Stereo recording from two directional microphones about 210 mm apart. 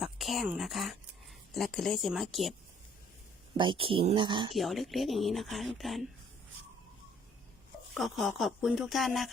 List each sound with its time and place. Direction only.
0.0 s speech: centre (ahead or behind)
3.6 s speech: 25° right (ahead or behind)
4.5 s speech: centre (ahead or behind)
7.9 s speech: centre (ahead or behind)